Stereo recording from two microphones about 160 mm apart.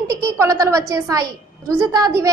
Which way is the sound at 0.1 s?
20° right (ahead or behind).